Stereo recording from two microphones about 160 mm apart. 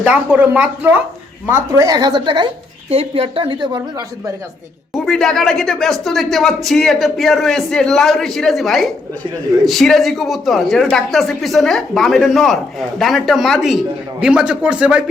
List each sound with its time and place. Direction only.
0.0 s speech: 10° right (ahead or behind); by 3.8 s 30° right (ahead or behind)
5.0 s speech: 5° left (ahead or behind)